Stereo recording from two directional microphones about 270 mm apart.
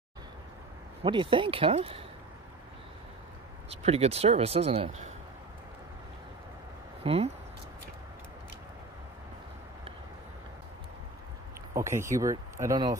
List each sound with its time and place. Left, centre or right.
1.0 s speech: centre
3.8 s speech: right
7.0 s speech: right
11.7 s speech: centre